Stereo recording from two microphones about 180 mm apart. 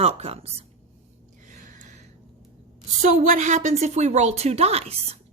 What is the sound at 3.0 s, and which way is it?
A woman's voice, 45° right (ahead or behind).